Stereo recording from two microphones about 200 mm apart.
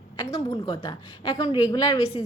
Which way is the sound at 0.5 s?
25° left (ahead or behind).